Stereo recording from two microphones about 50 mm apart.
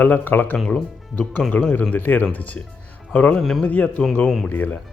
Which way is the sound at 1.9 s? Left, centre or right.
Left.